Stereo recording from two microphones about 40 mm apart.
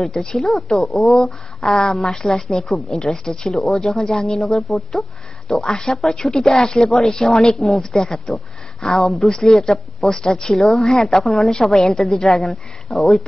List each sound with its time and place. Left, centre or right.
0.3 s a woman's voice: centre
5.5 s a woman's voice: centre
12.4 s a woman's voice: centre